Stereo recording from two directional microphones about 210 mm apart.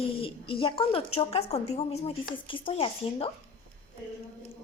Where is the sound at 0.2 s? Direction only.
25° left (ahead or behind).